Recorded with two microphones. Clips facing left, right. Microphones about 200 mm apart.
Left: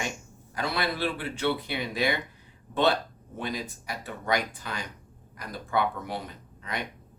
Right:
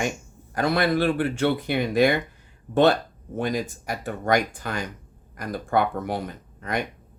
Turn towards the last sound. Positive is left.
turn(degrees=-50)  # may be behind; listen again after turning